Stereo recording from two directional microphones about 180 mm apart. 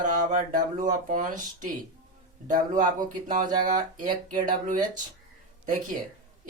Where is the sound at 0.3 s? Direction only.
45° right (ahead or behind).